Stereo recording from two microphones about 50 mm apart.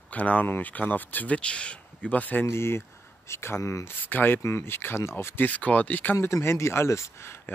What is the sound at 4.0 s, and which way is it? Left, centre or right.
Speech, left.